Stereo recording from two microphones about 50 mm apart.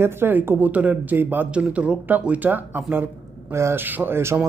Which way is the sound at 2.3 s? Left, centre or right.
Right.